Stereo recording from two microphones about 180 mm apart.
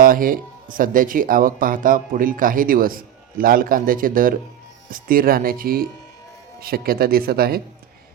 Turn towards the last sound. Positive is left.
turn(degrees=-60)  # may be behind; listen again after turning